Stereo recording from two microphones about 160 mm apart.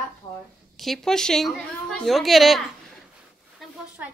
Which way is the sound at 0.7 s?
Centre (ahead or behind).